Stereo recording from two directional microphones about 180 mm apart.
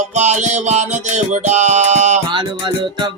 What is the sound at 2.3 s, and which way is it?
Music, 25° right (ahead or behind).